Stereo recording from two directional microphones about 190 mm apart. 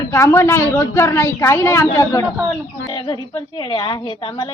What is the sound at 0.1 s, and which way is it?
A woman's voice, 15° left (ahead or behind).